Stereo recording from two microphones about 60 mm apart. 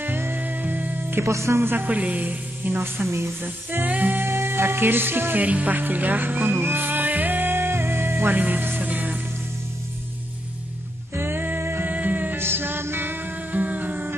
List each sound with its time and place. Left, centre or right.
0.0 s music: right
1.2 s speech: right
1.8 s a woman's voice: right
3.4 s music: right
4.3 s speech: right
5.4 s music: right
11.1 s music: right